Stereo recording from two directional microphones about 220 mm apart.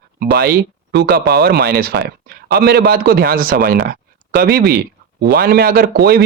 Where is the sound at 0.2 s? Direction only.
45° right (ahead or behind).